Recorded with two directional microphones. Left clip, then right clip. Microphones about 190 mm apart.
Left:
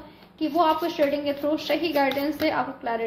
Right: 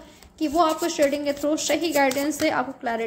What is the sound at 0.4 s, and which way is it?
A woman's voice, 50° right (ahead or behind).